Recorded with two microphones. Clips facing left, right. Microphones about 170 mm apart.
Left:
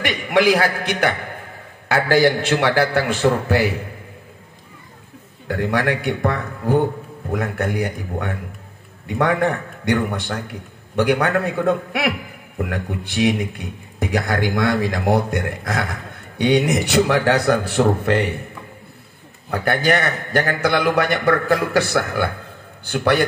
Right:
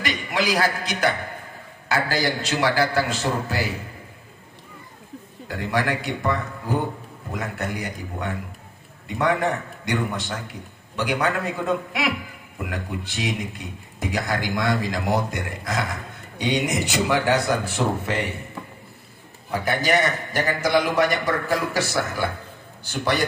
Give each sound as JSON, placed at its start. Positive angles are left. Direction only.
{"t": 0.0, "sound": "a man's voice", "side_deg": 60}
{"t": 5.5, "sound": "a man's voice", "side_deg": 60}
{"t": 19.5, "sound": "a man's voice", "side_deg": 60}